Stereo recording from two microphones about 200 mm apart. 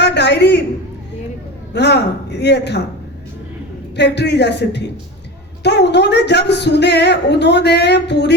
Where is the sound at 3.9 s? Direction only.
60° left (ahead or behind).